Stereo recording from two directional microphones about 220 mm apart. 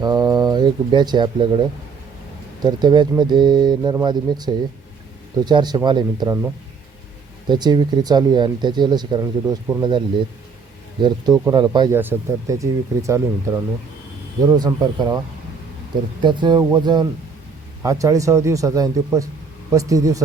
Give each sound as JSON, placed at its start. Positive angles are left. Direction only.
{"t": 0.0, "sound": "speech", "side_deg": -15}
{"t": 7.4, "sound": "speech", "side_deg": -20}
{"t": 11.0, "sound": "speech", "side_deg": -15}
{"t": 14.4, "sound": "speech", "side_deg": -15}
{"t": 16.2, "sound": "speech", "side_deg": -20}